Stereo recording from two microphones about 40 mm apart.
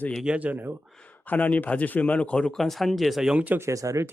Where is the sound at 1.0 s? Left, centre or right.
Left.